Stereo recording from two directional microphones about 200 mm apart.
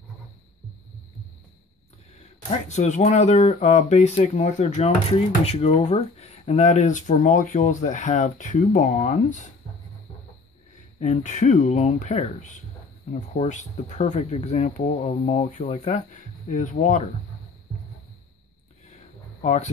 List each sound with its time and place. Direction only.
2.7 s speech: 35° left (ahead or behind)
11.0 s speech: 35° left (ahead or behind)
19.4 s speech: 35° left (ahead or behind)